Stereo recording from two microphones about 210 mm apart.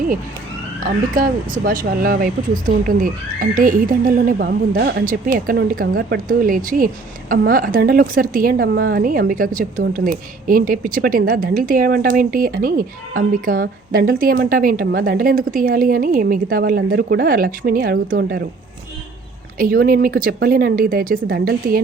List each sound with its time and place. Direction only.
0.9 s speech: 40° right (ahead or behind)
19.5 s speech: 45° right (ahead or behind)